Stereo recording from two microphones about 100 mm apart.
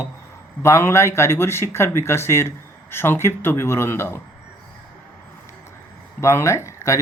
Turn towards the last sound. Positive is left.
turn(degrees=30)  # may be behind; listen again after turning